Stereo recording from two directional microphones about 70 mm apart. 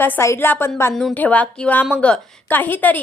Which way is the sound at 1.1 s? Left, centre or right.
Left.